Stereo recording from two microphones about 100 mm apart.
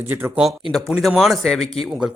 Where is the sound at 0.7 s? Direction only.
5° left (ahead or behind).